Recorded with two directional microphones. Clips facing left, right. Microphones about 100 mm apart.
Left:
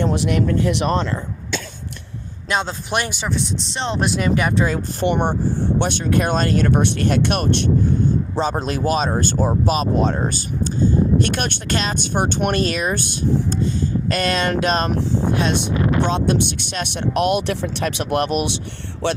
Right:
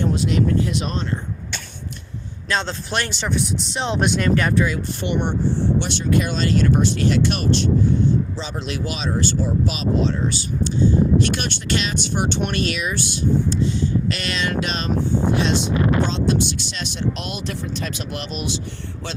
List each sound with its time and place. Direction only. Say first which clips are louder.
0.0 s speech: left 1 dB; 60° left (ahead or behind); by 1.2 s 80° left
2.5 s speech: left 2 dB; 15° left (ahead or behind)
3.2 s speech: even; centre (ahead or behind)
4.5 s speech: left 1 dB; 40° left (ahead or behind)
16.0 s speech: left 2 dB; 55° left (ahead or behind)